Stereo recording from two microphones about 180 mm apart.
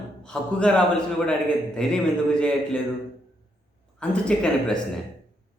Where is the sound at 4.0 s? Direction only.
5° left (ahead or behind).